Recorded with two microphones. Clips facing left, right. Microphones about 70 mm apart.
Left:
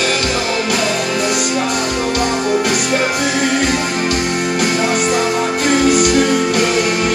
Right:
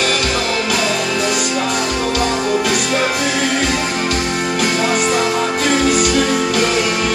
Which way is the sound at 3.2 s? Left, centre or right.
Left.